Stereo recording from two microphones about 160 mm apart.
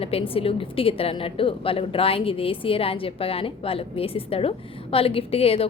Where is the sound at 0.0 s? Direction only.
35° left (ahead or behind).